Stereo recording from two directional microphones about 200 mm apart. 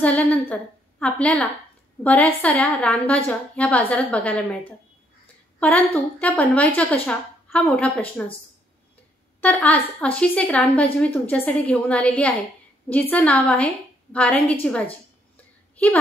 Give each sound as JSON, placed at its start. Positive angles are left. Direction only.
{"t": 0.0, "sound": "a woman's voice", "side_deg": 10}
{"t": 9.4, "sound": "a woman's voice", "side_deg": 10}
{"t": 15.3, "sound": "a sound", "side_deg": 5}